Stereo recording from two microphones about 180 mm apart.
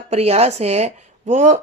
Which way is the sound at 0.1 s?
35° right (ahead or behind).